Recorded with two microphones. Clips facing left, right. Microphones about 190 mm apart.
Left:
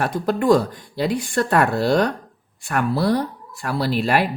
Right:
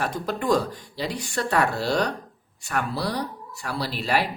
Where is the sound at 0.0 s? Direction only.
55° left (ahead or behind).